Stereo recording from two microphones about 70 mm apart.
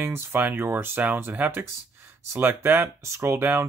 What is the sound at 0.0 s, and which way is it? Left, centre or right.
Speech, right.